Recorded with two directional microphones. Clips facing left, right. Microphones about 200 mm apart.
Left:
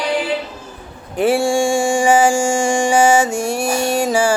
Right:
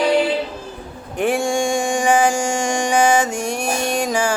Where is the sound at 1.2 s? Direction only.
5° left (ahead or behind).